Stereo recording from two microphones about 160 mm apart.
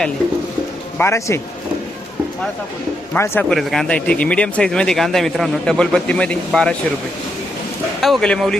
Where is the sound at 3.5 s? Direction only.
Centre (ahead or behind).